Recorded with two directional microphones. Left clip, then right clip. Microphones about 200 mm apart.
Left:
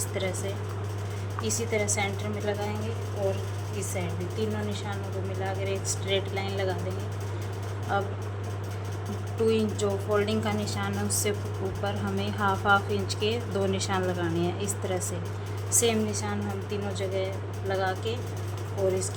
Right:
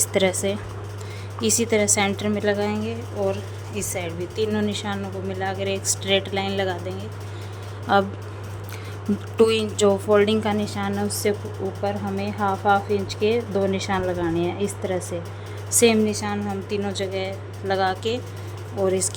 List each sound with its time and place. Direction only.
0.0 s speech: 50° right (ahead or behind)
3.8 s speech: 55° right (ahead or behind)
9.4 s a woman's voice: 55° right (ahead or behind); by 15.0 s 30° right (ahead or behind)
15.8 s speech: 45° right (ahead or behind)